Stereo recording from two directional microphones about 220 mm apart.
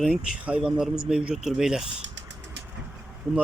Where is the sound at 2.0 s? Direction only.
55° right (ahead or behind).